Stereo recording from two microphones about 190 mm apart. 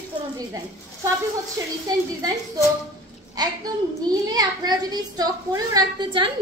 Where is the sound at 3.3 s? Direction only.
20° right (ahead or behind).